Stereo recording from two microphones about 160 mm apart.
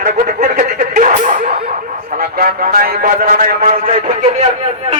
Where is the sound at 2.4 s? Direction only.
65° right (ahead or behind).